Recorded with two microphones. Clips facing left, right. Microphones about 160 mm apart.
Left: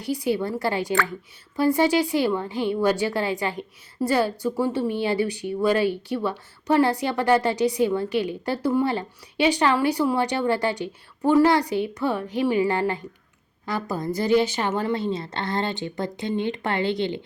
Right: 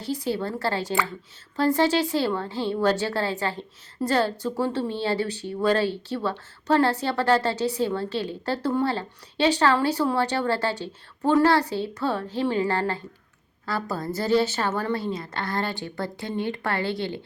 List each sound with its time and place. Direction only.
0.0 s a woman's voice: 15° left (ahead or behind)